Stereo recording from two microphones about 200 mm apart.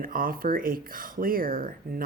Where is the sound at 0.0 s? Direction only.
45° right (ahead or behind).